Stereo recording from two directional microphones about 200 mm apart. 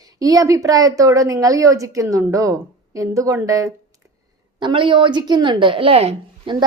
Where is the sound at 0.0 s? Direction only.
15° right (ahead or behind).